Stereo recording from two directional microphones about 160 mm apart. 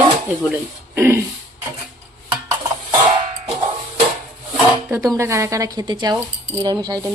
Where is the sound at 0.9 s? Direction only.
15° right (ahead or behind).